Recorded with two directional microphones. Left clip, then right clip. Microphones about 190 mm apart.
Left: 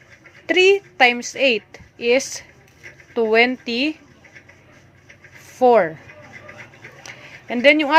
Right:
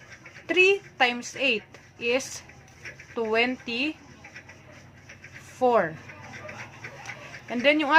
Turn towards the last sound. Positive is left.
turn(degrees=25)  # may be behind; listen again after turning